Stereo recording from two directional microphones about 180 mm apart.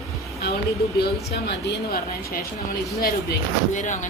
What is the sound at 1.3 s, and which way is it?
Speech, 60° left (ahead or behind).